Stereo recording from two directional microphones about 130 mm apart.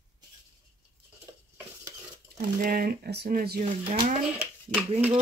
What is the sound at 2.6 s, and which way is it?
Speech, 90° right.